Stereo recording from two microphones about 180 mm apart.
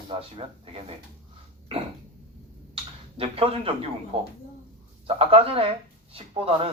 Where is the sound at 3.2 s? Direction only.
30° right (ahead or behind).